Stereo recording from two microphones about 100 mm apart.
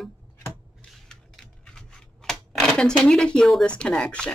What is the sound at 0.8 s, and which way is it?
Scissors, 5° left (ahead or behind).